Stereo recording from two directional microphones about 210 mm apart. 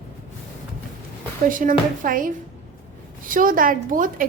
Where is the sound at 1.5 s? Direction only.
40° right (ahead or behind).